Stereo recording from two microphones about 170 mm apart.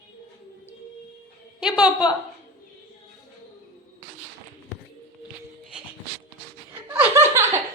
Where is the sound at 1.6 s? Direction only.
5° right (ahead or behind).